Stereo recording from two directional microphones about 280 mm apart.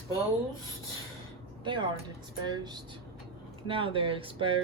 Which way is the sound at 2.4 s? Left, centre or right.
Centre.